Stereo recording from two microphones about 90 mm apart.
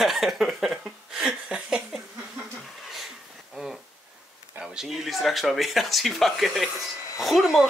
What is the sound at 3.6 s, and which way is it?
Speech, 5° right (ahead or behind).